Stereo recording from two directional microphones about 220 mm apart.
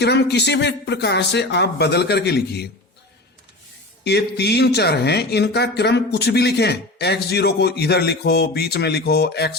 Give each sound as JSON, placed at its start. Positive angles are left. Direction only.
{"t": 0.0, "sound": "speech", "side_deg": 50}
{"t": 4.0, "sound": "speech", "side_deg": 50}